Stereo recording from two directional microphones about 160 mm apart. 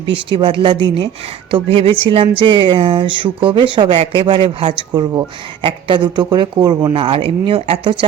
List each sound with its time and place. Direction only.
0.0 s speech: 30° right (ahead or behind)